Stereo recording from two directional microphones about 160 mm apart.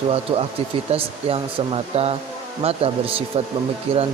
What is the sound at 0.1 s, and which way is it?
Speech, 35° right (ahead or behind).